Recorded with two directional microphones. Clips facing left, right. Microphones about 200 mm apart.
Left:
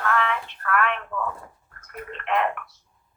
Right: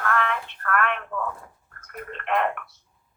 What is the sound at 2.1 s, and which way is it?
Tick-tock, 50° right (ahead or behind).